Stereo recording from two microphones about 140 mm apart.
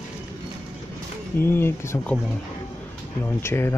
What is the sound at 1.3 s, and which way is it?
Speech, 15° left (ahead or behind).